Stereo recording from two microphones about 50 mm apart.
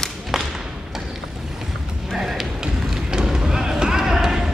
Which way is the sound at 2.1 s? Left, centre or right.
Centre.